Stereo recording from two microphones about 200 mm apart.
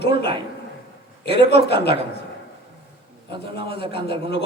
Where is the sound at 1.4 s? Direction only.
55° left (ahead or behind).